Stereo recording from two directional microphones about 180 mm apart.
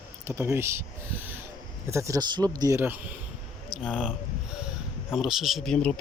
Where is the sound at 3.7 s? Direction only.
5° right (ahead or behind).